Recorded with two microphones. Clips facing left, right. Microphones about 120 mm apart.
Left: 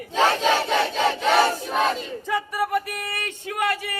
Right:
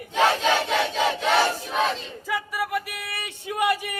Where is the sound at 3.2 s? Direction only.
15° right (ahead or behind).